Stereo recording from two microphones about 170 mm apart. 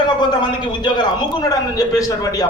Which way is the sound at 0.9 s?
25° left (ahead or behind).